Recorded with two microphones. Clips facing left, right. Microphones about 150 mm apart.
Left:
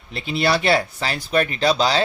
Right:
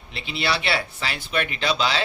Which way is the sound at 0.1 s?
45° left (ahead or behind).